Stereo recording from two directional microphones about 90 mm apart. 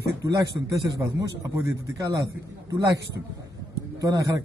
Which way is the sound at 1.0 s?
30° right (ahead or behind).